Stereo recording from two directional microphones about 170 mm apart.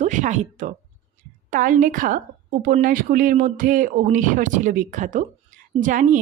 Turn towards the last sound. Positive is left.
turn(degrees=-50)  # may be behind; listen again after turning